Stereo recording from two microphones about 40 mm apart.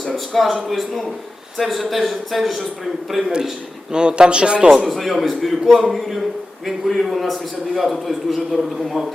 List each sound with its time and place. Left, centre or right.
0.0 s a man's voice: centre
3.9 s a man's voice: right
4.9 s a man's voice: centre